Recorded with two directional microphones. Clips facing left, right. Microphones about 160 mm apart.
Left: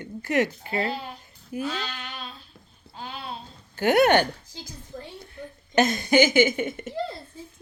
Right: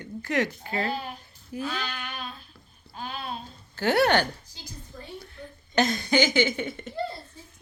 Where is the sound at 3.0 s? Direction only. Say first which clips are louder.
Right 1 dB; 20° left (ahead or behind).